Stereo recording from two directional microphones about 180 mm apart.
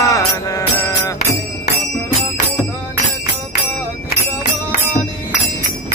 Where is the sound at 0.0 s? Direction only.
15° left (ahead or behind).